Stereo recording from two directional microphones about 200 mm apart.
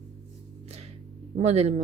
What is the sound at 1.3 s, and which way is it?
Speech, 35° right (ahead or behind).